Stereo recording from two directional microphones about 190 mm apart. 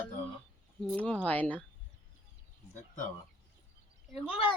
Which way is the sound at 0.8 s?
5° left (ahead or behind).